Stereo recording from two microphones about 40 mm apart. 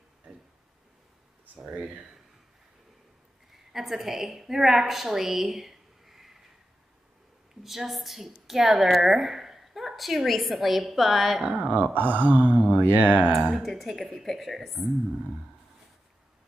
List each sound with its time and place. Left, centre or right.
1.6 s speech: centre
3.7 s a woman's voice: centre
7.6 s a woman's voice: centre
11.4 s speech: right
12.8 s speech: right
13.7 s a woman's voice: centre